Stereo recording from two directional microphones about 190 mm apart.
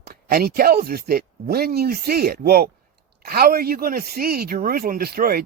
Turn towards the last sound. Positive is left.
turn(degrees=-55)  # may be behind; listen again after turning